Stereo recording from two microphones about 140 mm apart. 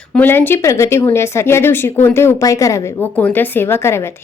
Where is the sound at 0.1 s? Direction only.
15° left (ahead or behind).